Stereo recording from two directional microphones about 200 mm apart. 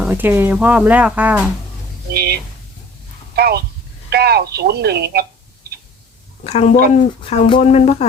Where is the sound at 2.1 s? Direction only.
50° right (ahead or behind).